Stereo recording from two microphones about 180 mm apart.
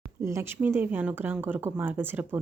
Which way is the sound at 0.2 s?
15° right (ahead or behind).